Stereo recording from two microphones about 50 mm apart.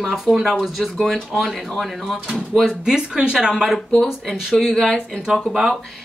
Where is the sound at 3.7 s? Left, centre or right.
Centre.